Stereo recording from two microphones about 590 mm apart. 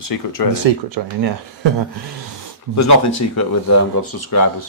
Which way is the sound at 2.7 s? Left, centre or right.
Left.